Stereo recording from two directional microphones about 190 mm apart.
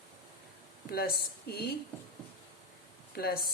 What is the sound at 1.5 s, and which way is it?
Speech, 55° left (ahead or behind).